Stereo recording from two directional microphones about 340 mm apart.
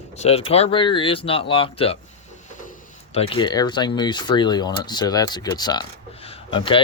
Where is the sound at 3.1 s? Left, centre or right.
Centre.